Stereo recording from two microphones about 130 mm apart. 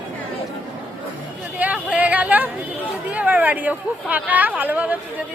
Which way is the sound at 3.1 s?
10° right (ahead or behind).